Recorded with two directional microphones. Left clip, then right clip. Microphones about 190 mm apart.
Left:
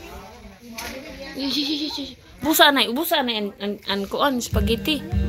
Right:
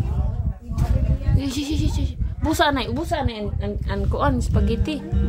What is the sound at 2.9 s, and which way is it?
A woman's voice, 30° left (ahead or behind).